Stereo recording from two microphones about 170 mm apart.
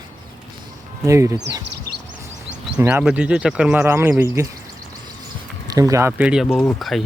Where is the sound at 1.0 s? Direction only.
15° right (ahead or behind).